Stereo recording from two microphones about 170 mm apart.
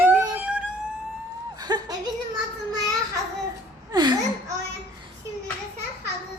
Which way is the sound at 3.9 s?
25° right (ahead or behind).